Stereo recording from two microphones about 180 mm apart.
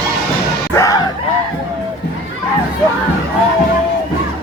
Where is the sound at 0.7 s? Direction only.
20° left (ahead or behind).